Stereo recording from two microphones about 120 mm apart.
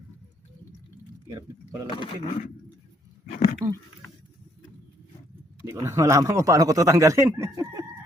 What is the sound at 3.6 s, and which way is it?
Speech, 30° right (ahead or behind).